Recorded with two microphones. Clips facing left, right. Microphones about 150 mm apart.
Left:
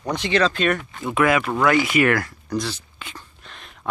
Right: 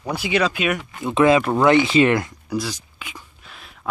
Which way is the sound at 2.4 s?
10° right (ahead or behind).